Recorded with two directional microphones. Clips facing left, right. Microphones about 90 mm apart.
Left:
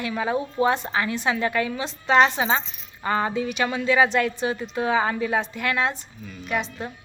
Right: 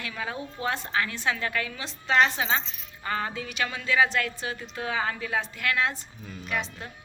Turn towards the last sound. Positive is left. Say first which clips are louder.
# left 5 dB
turn(degrees=15)  # may be behind; listen again after turning